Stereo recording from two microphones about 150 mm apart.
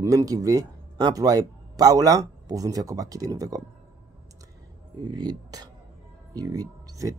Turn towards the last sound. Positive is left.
turn(degrees=-25)  # may be behind; listen again after turning